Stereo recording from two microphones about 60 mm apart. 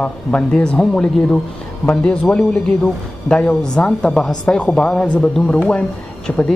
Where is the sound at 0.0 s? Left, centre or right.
Centre.